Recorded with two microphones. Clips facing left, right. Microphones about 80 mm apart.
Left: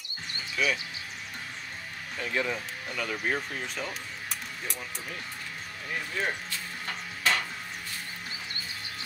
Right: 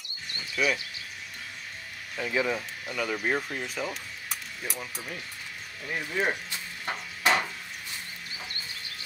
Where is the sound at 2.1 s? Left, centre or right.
Centre.